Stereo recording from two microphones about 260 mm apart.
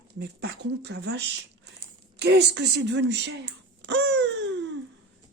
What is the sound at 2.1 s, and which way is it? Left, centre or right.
Wail, right.